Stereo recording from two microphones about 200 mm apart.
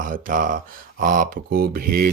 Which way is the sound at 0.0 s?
45° right (ahead or behind).